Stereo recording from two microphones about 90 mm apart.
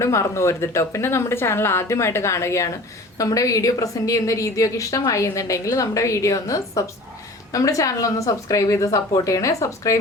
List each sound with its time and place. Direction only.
0.0 s a woman's voice: 35° left (ahead or behind)